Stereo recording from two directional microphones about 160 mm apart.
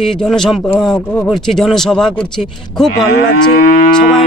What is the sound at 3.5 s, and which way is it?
Moo, 60° left (ahead or behind).